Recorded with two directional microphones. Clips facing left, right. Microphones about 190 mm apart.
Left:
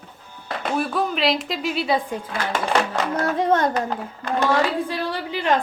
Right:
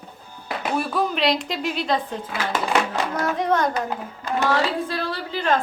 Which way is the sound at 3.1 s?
25° left (ahead or behind).